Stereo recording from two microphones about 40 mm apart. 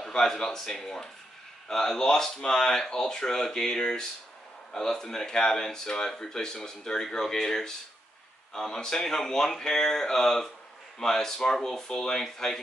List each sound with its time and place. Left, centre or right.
0.1 s speech: centre